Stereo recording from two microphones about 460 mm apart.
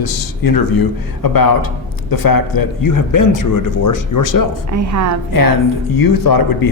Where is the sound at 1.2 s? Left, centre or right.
Left.